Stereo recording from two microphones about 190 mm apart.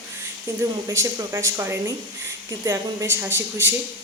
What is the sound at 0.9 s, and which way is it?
Speech, 15° right (ahead or behind).